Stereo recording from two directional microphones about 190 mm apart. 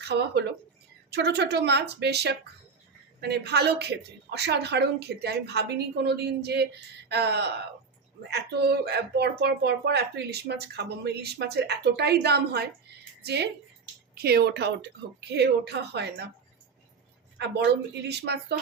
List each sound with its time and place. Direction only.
0.0 s speech: 60° right (ahead or behind)
17.3 s a woman's voice: 60° right (ahead or behind)